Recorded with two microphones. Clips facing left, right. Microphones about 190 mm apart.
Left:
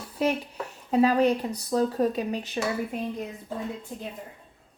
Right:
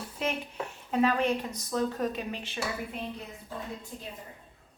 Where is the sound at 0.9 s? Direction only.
35° left (ahead or behind).